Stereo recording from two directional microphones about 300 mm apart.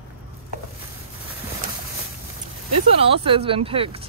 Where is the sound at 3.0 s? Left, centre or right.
Centre.